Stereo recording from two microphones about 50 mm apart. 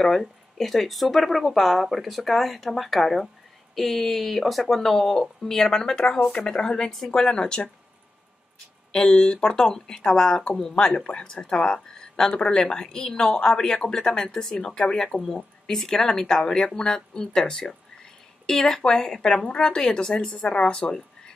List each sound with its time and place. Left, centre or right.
0.0 s speech: centre
8.9 s speech: centre